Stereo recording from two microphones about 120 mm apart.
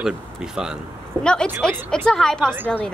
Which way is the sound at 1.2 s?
5° left (ahead or behind).